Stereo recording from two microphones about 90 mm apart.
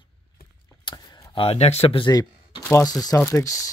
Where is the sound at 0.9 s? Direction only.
80° left.